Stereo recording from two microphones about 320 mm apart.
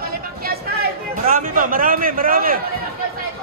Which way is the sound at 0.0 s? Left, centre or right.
Right.